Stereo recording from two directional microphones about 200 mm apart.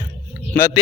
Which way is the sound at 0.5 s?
15° left (ahead or behind).